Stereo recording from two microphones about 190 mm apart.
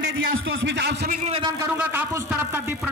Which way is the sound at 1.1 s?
35° right (ahead or behind).